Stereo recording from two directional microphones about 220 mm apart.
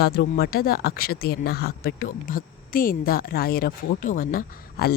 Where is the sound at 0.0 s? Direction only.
45° left (ahead or behind).